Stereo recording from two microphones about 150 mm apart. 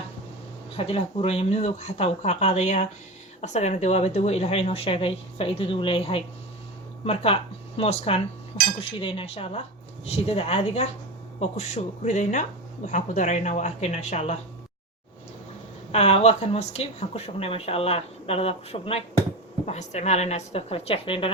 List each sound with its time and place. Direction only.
0.8 s speech: 40° left (ahead or behind)
15.9 s speech: 40° left (ahead or behind)